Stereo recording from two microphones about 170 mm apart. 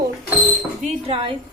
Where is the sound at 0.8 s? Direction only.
35° right (ahead or behind).